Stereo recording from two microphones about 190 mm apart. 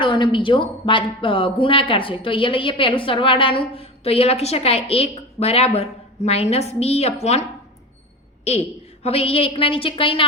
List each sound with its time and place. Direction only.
0.0 s speech: 25° left (ahead or behind)
9.0 s speech: 30° left (ahead or behind)